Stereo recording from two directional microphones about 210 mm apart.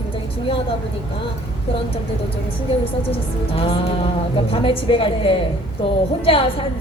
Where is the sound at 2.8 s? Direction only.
25° left (ahead or behind).